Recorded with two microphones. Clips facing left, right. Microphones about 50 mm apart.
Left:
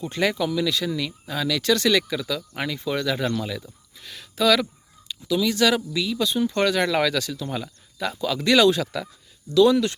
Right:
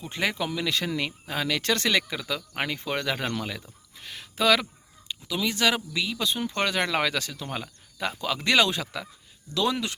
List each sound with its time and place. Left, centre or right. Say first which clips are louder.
0.0 s speech: left 5 dB; centre
0.4 s speech: left 4 dB; right